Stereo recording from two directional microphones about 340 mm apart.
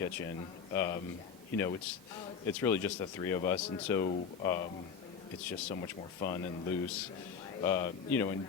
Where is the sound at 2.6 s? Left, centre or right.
Centre.